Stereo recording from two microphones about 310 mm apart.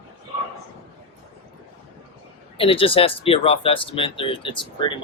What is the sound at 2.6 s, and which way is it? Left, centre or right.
Speech, centre.